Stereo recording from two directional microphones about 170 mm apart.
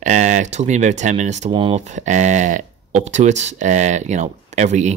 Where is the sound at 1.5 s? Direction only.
30° right (ahead or behind).